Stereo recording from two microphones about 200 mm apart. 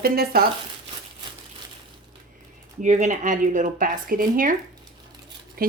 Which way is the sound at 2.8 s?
35° right (ahead or behind).